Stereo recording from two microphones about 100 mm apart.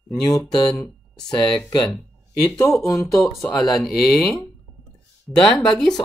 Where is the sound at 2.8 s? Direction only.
35° left (ahead or behind).